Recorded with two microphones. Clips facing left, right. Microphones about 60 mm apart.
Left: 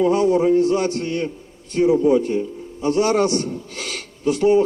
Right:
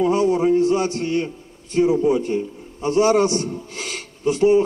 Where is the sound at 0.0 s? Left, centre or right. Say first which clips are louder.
Left 1 dB; right.